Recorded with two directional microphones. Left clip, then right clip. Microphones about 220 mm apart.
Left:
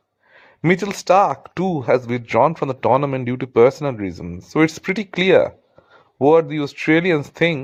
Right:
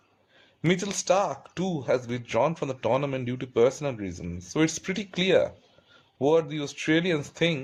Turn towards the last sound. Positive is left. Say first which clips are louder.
# left 8 dB
turn(degrees=25)  # may be behind; listen again after turning